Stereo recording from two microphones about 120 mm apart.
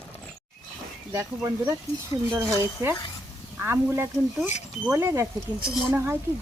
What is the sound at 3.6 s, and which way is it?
Speech, 20° right (ahead or behind).